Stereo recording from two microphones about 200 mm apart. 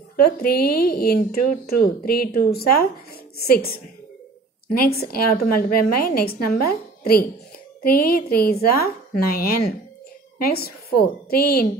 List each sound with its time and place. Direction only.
0.1 s speech: 50° left (ahead or behind)